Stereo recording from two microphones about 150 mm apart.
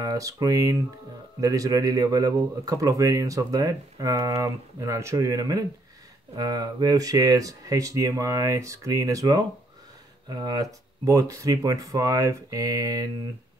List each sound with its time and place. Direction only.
0.0 s speech: 25° right (ahead or behind)